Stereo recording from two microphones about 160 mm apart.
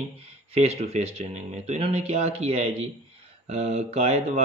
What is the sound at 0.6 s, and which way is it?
A man's voice, 40° right (ahead or behind).